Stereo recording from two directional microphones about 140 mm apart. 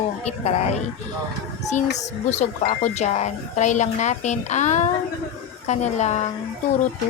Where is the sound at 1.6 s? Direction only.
55° left (ahead or behind).